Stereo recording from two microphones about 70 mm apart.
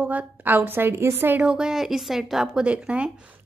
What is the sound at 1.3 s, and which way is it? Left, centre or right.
A woman's voice, centre.